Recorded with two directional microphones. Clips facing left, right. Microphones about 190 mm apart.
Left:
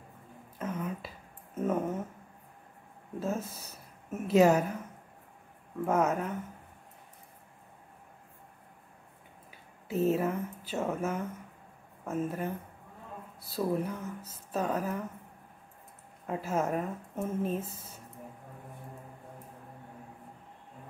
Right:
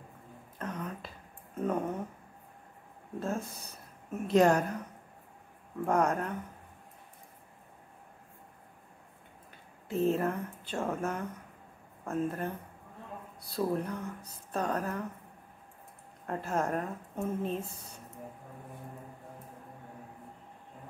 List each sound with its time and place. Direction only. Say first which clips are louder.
0.6 s a sound: left 3 dB; 5° left (ahead or behind)
3.2 s speech: left 1 dB; 5° left (ahead or behind)
5.9 s speech: even; 5° left (ahead or behind)
9.5 s speech: left 1 dB; 5° left (ahead or behind)
16.3 s speech: left 1 dB; 5° left (ahead or behind)